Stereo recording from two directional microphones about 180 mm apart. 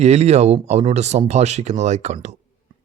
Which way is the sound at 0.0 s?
40° right (ahead or behind).